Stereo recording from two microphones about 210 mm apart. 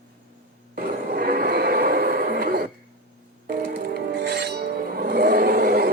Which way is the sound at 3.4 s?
50° right (ahead or behind).